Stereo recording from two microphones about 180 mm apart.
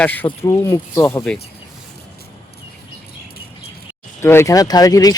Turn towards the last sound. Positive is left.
turn(degrees=20)  # may be behind; listen again after turning